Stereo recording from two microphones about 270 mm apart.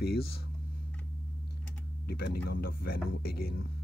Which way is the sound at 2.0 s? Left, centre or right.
Left.